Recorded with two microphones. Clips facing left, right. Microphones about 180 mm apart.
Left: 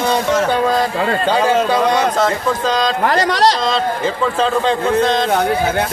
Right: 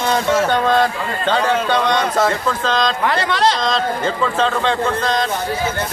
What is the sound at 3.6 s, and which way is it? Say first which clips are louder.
A man's voice: left 2 dB; 5° left (ahead or behind).